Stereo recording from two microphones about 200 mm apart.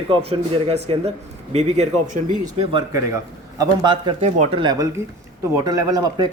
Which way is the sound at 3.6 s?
20° right (ahead or behind).